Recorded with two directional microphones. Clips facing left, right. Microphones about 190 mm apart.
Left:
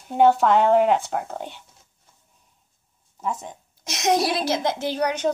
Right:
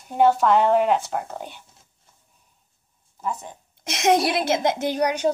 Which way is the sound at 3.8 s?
25° right (ahead or behind).